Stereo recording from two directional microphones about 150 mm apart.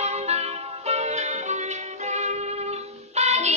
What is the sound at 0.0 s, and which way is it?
Music, 45° right (ahead or behind).